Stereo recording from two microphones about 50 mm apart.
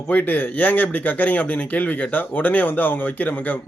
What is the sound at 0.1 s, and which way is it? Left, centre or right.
A man's voice, left.